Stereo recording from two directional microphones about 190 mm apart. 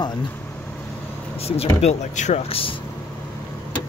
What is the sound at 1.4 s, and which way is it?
Speech, 30° left (ahead or behind).